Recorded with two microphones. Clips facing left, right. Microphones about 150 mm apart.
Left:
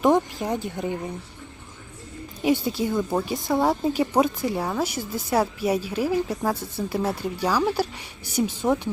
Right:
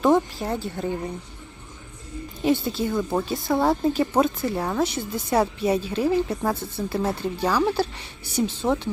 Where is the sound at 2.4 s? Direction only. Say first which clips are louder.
Even; 10° left (ahead or behind).